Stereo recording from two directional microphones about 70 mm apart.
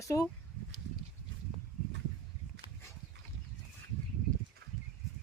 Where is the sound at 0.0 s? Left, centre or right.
Left.